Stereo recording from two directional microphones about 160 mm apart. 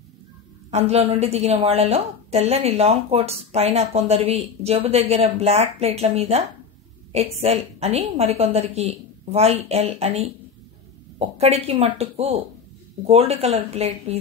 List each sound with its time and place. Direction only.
0.7 s a woman's voice: 40° right (ahead or behind)